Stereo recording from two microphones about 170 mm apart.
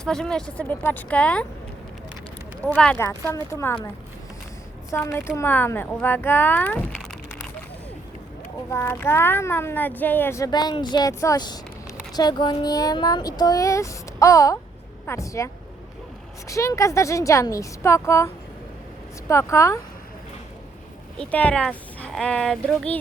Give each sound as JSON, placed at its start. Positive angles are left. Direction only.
{"t": 0.0, "sound": "a child's voice", "side_deg": 5}
{"t": 2.6, "sound": "speech", "side_deg": 5}
{"t": 3.0, "sound": "a child's voice", "side_deg": 20}
{"t": 4.9, "sound": "a child's voice", "side_deg": 15}
{"t": 8.7, "sound": "a child's voice", "side_deg": 15}
{"t": 16.5, "sound": "a child's voice", "side_deg": 15}
{"t": 19.3, "sound": "a child's voice", "side_deg": 15}
{"t": 21.2, "sound": "speech", "side_deg": 10}